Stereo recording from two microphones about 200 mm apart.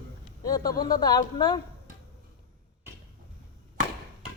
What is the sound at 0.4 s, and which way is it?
A man's voice, 20° left (ahead or behind).